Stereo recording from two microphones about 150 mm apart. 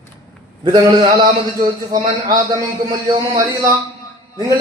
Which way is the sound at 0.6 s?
30° right (ahead or behind).